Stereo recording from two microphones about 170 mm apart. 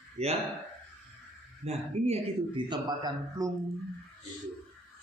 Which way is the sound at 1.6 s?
40° right (ahead or behind).